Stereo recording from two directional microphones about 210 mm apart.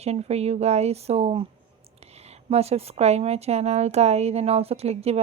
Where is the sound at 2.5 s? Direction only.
30° right (ahead or behind).